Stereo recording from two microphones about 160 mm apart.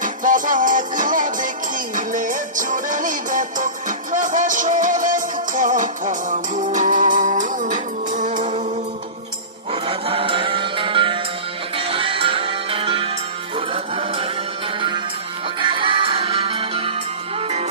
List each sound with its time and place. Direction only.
0.0 s music: 55° right (ahead or behind)
9.8 s music: 35° right (ahead or behind)